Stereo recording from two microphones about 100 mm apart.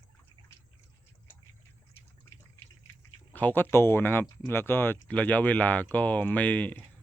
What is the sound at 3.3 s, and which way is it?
Speech, 20° left (ahead or behind).